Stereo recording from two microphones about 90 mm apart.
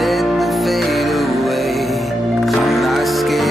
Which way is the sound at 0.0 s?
Centre (ahead or behind).